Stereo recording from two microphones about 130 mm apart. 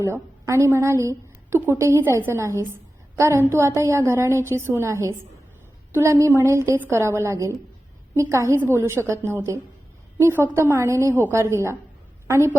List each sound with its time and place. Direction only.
0.0 s a woman's voice: 20° right (ahead or behind)